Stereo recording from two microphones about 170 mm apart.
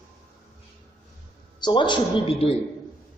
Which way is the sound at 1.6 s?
25° left (ahead or behind).